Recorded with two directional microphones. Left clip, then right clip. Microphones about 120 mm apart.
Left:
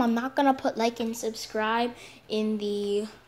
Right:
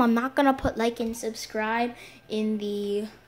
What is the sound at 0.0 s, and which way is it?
Speech, 25° right (ahead or behind).